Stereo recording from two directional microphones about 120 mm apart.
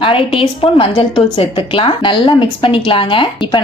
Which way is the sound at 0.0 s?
50° left (ahead or behind).